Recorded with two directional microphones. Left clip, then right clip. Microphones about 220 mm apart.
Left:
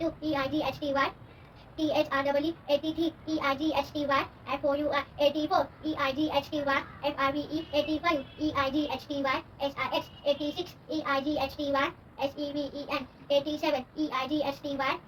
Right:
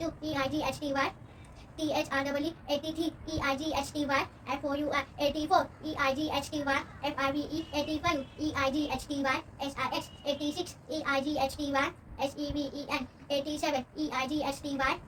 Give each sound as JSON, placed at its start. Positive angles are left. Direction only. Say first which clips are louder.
{"t": 0.2, "sound": "a child's voice", "louder": "left 2 dB", "side_deg": -20}